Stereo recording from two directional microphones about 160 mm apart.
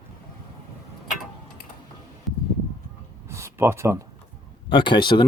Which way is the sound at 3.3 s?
15° right (ahead or behind).